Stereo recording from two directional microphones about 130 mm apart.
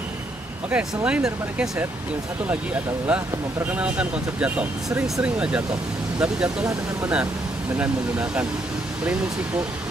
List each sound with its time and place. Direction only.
0.7 s speech: 10° right (ahead or behind)
3.1 s speech: 5° right (ahead or behind)
7.7 s speech: 10° right (ahead or behind)